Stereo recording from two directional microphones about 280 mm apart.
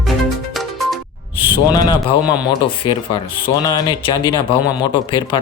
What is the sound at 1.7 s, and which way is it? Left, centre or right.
Speech, centre.